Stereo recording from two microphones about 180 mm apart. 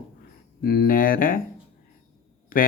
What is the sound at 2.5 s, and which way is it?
Speech, 50° left (ahead or behind).